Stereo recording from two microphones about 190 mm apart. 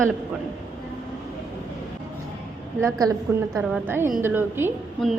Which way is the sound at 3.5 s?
5° right (ahead or behind).